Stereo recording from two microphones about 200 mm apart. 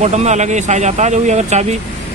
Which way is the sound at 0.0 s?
35° right (ahead or behind).